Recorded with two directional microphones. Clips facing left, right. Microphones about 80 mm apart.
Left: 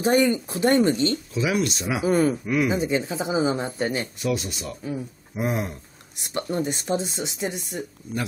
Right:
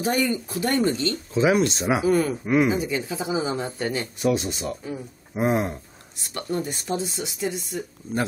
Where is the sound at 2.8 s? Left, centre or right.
Left.